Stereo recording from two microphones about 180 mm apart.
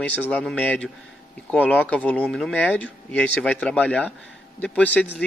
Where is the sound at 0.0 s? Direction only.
5° left (ahead or behind).